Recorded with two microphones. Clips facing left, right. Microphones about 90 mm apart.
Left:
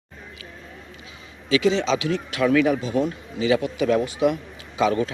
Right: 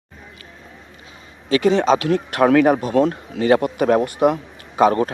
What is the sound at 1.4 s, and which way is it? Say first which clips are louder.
A man's voice: right 5 dB; 50° right (ahead or behind).